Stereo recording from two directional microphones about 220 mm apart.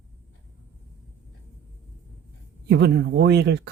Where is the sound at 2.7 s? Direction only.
50° right (ahead or behind).